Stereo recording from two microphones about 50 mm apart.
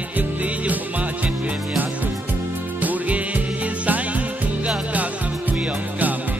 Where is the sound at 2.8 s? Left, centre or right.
Right.